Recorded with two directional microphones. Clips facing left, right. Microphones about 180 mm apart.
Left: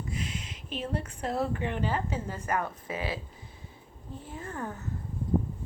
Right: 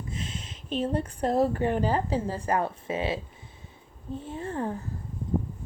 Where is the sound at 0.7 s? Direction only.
35° right (ahead or behind).